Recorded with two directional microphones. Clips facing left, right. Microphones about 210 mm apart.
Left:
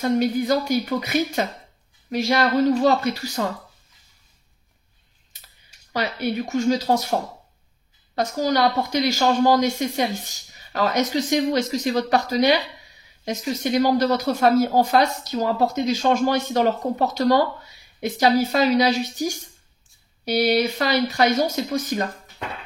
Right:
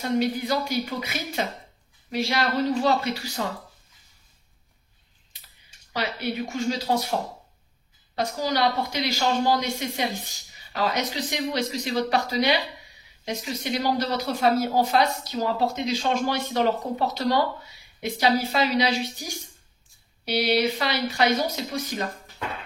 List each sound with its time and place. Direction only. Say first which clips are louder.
0.0 s speech: left 4 dB; 45° left (ahead or behind)
5.9 s speech: left 4 dB; 45° left (ahead or behind)
8.2 s speech: left 4 dB; 45° left (ahead or behind)
20.2 s speech: left 3 dB; 45° left (ahead or behind)